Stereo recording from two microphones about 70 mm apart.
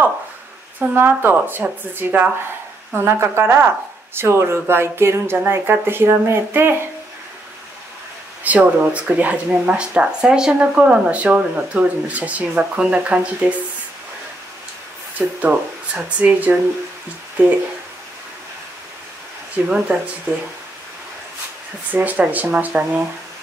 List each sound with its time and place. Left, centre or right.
0.7 s speech: right
8.5 s speech: centre
15.1 s speech: centre
19.5 s speech: centre
21.9 s speech: right